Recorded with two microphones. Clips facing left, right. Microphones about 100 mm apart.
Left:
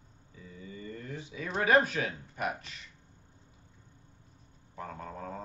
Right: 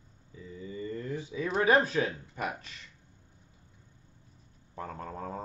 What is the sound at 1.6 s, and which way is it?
Speech, 30° right (ahead or behind).